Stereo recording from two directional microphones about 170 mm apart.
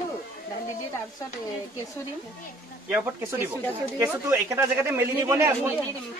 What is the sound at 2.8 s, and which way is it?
Speech, 10° right (ahead or behind).